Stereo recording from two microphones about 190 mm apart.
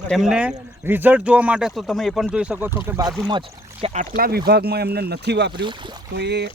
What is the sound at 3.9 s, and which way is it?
Speech, 45° right (ahead or behind).